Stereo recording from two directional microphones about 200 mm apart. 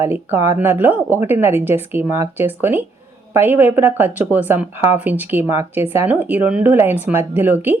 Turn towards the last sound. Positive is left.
turn(degrees=-10)  # may be behind; listen again after turning